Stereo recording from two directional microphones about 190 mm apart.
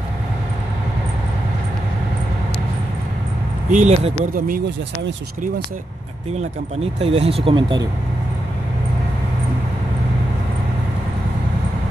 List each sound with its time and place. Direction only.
3.7 s speech: 35° right (ahead or behind)
6.3 s speech: 30° right (ahead or behind)